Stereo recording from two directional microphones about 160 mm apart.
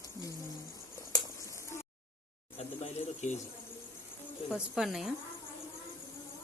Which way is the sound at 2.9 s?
45° left (ahead or behind).